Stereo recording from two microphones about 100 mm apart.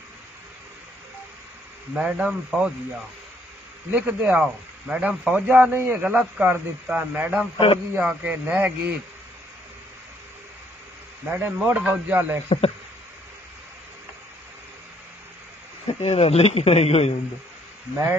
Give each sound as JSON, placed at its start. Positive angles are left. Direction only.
{"t": 2.0, "sound": "a man's voice", "side_deg": -10}
{"t": 3.9, "sound": "a man's voice", "side_deg": -15}
{"t": 7.5, "sound": "a man's voice", "side_deg": 65}
{"t": 8.0, "sound": "a man's voice", "side_deg": -10}
{"t": 11.2, "sound": "a man's voice", "side_deg": -15}
{"t": 12.4, "sound": "speech", "side_deg": 90}
{"t": 15.9, "sound": "speech", "side_deg": 90}